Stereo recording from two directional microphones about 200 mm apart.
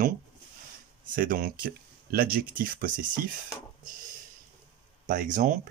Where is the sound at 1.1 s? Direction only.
45° right (ahead or behind).